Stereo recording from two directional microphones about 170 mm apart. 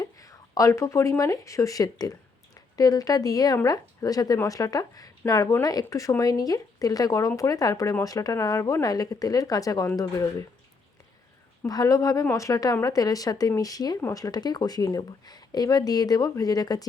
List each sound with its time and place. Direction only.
0.0 s speech: 20° left (ahead or behind)
11.6 s speech: 20° left (ahead or behind)